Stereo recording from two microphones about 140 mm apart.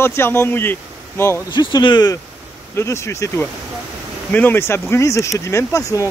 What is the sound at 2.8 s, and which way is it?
Speech, 20° left (ahead or behind).